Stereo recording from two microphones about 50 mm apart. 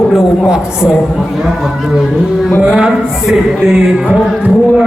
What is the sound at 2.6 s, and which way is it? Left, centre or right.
Speech, centre.